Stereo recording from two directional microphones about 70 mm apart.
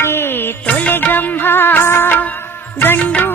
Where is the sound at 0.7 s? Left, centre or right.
Centre.